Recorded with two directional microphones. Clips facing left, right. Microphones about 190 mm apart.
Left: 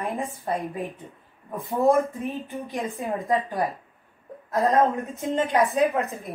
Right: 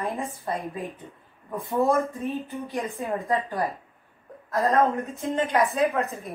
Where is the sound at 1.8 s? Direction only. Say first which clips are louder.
Left 6 dB; 15° left (ahead or behind).